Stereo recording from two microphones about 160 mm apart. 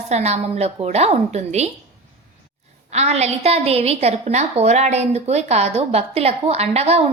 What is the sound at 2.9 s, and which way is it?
A woman's voice, 45° right (ahead or behind).